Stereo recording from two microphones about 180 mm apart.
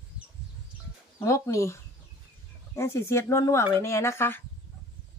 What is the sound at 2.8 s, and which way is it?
Speech, 15° left (ahead or behind).